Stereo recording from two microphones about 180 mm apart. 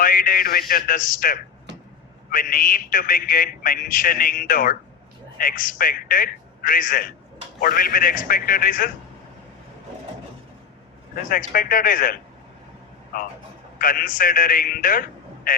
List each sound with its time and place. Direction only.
0.0 s a man's voice: 50° left (ahead or behind)
11.1 s a man's voice: 50° left (ahead or behind)